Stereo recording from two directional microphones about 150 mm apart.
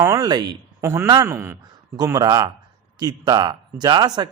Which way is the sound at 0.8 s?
15° right (ahead or behind).